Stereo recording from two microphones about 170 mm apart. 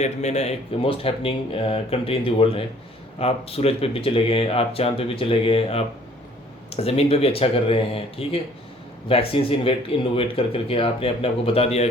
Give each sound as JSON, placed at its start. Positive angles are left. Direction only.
{"t": 0.0, "sound": "speech", "side_deg": 40}